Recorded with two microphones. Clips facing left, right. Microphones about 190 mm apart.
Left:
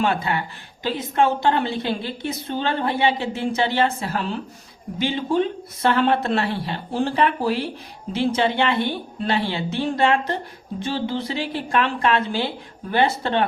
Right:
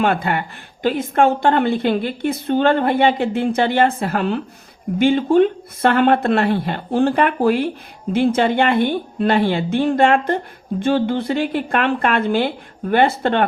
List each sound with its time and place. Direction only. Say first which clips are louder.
0.0 s a woman's voice: right 4 dB; 55° right (ahead or behind)